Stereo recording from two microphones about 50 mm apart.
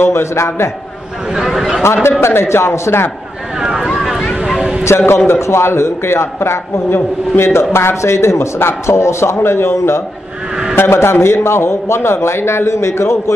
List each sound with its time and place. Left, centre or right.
0.0 s a man's voice: left
1.3 s speech: centre
2.0 s a man's voice: left
3.6 s a sound: centre
4.8 s a man's voice: left
9.4 s a man's voice: left